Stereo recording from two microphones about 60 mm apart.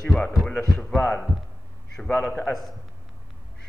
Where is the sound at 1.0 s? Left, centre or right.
Left.